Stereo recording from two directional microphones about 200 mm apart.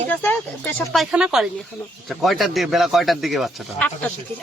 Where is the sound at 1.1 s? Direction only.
5° right (ahead or behind).